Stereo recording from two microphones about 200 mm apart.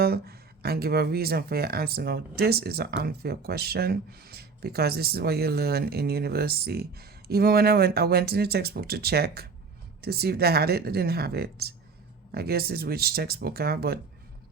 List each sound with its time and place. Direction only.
0.0 s speech: 50° right (ahead or behind)